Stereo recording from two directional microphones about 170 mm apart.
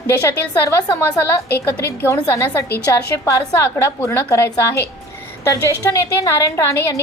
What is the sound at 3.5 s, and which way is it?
A woman's voice, 15° left (ahead or behind).